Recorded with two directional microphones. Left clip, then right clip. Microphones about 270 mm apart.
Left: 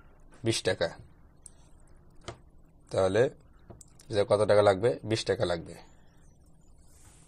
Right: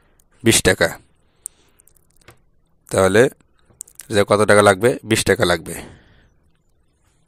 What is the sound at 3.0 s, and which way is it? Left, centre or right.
Speech, right.